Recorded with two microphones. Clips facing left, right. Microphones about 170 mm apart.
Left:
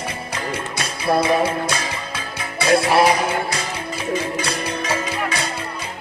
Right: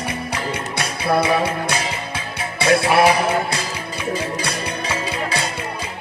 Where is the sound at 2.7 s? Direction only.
30° left (ahead or behind).